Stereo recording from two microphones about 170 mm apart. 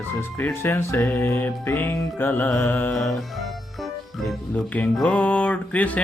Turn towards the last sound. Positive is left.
turn(degrees=10)  # may be behind; listen again after turning